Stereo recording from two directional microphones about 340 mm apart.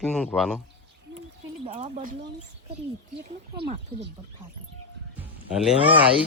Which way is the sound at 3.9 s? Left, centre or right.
Centre.